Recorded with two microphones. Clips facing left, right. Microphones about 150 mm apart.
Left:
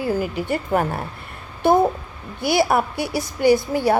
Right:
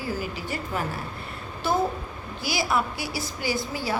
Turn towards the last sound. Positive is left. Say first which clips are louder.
# left 12 dB
turn(degrees=45)  # may be behind; listen again after turning